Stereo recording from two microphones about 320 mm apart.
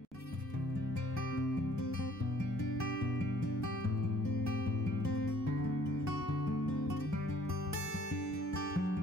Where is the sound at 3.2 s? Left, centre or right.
Left.